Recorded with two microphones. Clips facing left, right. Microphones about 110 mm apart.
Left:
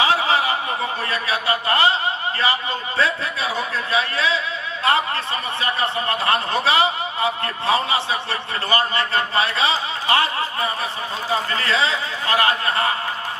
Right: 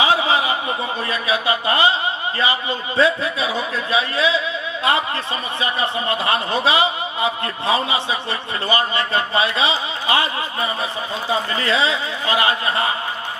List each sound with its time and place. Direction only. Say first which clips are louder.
0.0 s chuckle: right 1 dB; 15° right (ahead or behind)
1.1 s music: right 4 dB; 15° right (ahead or behind)
2.4 s speech: right 2 dB; 15° right (ahead or behind)
5.5 s speech: right 1 dB; 15° right (ahead or behind)